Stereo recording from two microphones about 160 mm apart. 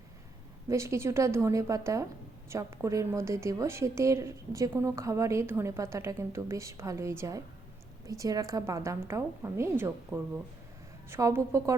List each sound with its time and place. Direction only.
0.7 s a woman's voice: 15° right (ahead or behind)